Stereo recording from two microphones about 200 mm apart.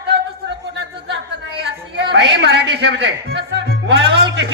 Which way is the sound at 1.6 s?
55° right (ahead or behind).